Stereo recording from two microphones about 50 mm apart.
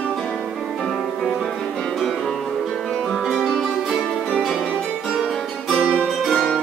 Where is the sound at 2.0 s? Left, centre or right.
Centre.